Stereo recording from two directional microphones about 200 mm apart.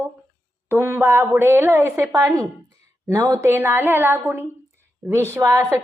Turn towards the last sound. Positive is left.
turn(degrees=-15)  # may be behind; listen again after turning